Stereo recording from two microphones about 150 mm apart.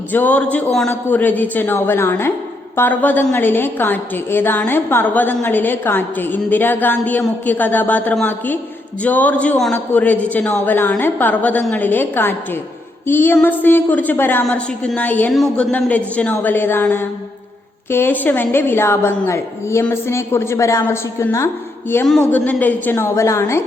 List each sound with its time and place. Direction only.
0.1 s a woman's voice: 10° left (ahead or behind)